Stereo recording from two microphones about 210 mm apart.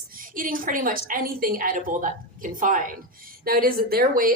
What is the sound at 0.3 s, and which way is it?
A woman's voice, 40° right (ahead or behind).